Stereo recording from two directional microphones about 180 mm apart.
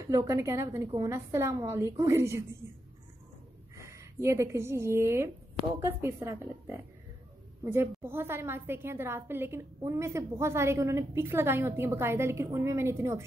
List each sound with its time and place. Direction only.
0.1 s a woman's voice: 15° right (ahead or behind)
3.7 s a woman's voice: 15° right (ahead or behind)